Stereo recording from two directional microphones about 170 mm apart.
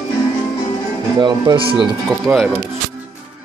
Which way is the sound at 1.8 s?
Centre (ahead or behind).